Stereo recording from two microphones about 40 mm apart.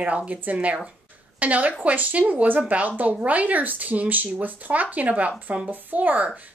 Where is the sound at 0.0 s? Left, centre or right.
Right.